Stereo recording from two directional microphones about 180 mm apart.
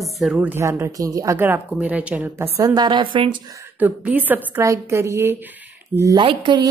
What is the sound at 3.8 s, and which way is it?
A woman's voice, 10° right (ahead or behind).